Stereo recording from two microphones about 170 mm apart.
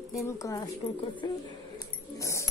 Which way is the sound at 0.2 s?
20° left (ahead or behind).